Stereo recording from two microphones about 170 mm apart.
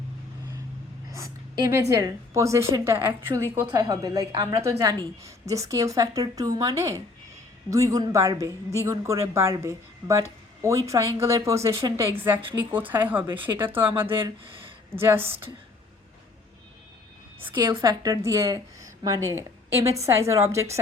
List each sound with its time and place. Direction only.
1.1 s a woman's voice: 20° right (ahead or behind)
14.2 s speech: 30° right (ahead or behind)
14.9 s a woman's voice: 15° right (ahead or behind)
17.7 s a woman's voice: 20° right (ahead or behind)